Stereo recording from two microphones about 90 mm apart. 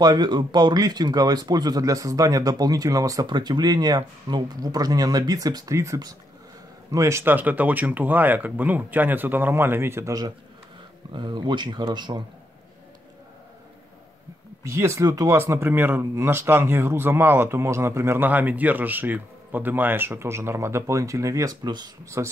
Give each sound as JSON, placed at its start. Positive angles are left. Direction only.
{"t": 0.0, "sound": "speech", "side_deg": -55}
{"t": 3.3, "sound": "a man's voice", "side_deg": -55}
{"t": 11.1, "sound": "speech", "side_deg": -55}
{"t": 14.6, "sound": "speech", "side_deg": -30}
{"t": 15.3, "sound": "a man's voice", "side_deg": -25}
{"t": 21.6, "sound": "speech", "side_deg": -50}
{"t": 22.2, "sound": "speech", "side_deg": -35}